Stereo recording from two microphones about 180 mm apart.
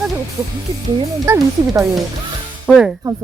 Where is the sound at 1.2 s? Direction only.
15° right (ahead or behind).